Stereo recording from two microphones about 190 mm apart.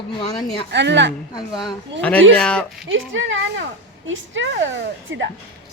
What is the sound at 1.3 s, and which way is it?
Speech, 20° left (ahead or behind).